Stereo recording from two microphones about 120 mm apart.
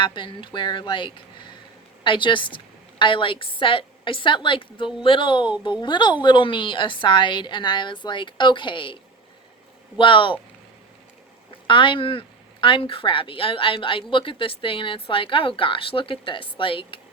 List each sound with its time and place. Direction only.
0.0 s speech: 45° left (ahead or behind)
10.0 s speech: 45° left (ahead or behind)
11.7 s speech: 45° left (ahead or behind)